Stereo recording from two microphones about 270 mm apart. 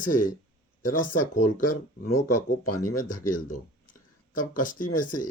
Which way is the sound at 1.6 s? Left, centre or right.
Left.